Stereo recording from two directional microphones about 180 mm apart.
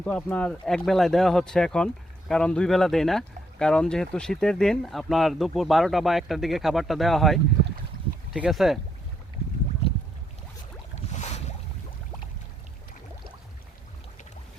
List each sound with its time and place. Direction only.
0.0 s speech: 5° left (ahead or behind)
10.9 s boat: 40° left (ahead or behind)